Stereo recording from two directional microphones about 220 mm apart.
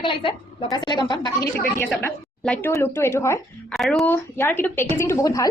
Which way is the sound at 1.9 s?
5° left (ahead or behind).